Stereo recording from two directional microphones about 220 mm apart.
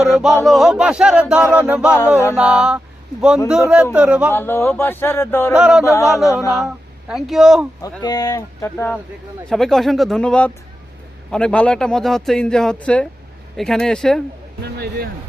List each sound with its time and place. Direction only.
0.0 s speech: centre (ahead or behind)
2.3 s a sound: 5° right (ahead or behind)
3.9 s speech: 5° right (ahead or behind)
4.3 s speech: 10° left (ahead or behind)
5.5 s speech: 5° right (ahead or behind)
5.8 s speech: 15° left (ahead or behind)
6.1 s speech: centre (ahead or behind)
8.0 s speech: 15° left (ahead or behind)
14.6 s speech: 45° right (ahead or behind)